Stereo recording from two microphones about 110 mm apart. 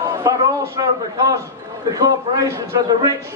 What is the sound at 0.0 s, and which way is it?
A man's voice, 30° right (ahead or behind).